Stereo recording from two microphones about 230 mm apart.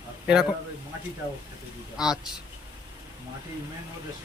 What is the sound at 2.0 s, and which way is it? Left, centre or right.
Speech, centre.